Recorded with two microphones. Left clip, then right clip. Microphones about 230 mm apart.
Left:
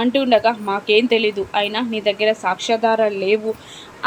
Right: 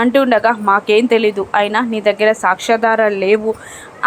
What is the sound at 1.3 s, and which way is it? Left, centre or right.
A woman's voice, centre.